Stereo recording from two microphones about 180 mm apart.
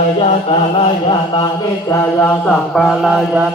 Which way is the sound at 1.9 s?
15° left (ahead or behind).